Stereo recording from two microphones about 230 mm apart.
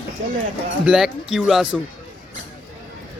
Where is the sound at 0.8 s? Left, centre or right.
Centre.